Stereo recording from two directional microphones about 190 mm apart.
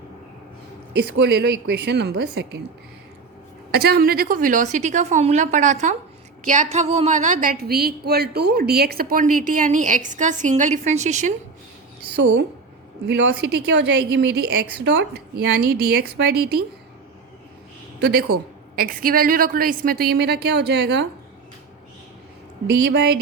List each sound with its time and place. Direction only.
0.9 s a woman's voice: 60° right (ahead or behind)
3.7 s a woman's voice: 55° right (ahead or behind); by 7.5 s 40° right (ahead or behind)
7.6 s speech: 55° right (ahead or behind); by 11.3 s 40° right (ahead or behind)
12.1 s a woman's voice: 70° right (ahead or behind)
18.0 s a woman's voice: 55° right (ahead or behind)
22.6 s a woman's voice: 60° right (ahead or behind)